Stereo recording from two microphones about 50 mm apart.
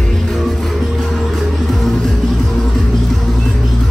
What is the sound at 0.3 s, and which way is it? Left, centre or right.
Music, centre.